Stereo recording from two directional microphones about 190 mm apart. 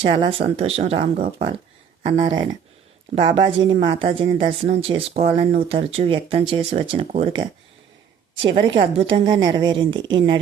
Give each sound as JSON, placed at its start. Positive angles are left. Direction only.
{"t": 0.0, "sound": "speech", "side_deg": -25}
{"t": 2.2, "sound": "speech", "side_deg": -25}